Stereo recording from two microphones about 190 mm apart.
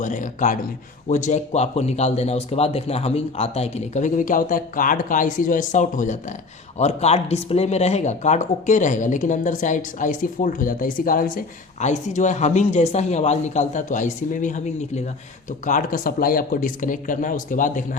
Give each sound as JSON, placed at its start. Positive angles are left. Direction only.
{"t": 0.0, "sound": "speech", "side_deg": 40}